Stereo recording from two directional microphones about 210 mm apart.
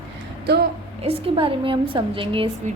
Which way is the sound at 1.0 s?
25° right (ahead or behind).